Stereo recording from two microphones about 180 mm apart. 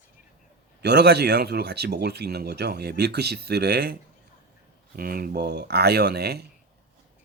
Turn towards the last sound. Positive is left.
turn(degrees=-65)  # may be behind; listen again after turning